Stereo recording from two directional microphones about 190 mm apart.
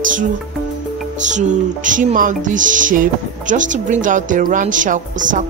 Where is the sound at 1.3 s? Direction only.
40° right (ahead or behind).